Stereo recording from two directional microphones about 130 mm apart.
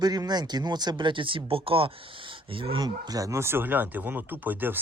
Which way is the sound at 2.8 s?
30° right (ahead or behind).